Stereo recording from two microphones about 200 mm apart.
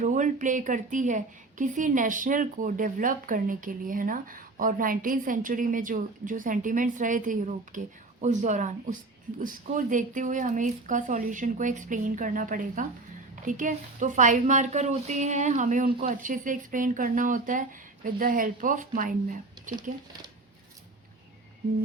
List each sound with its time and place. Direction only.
0.0 s a woman's voice: 40° right (ahead or behind)